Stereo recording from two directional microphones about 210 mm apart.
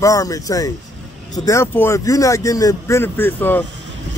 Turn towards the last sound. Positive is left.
turn(degrees=10)  # may be behind; listen again after turning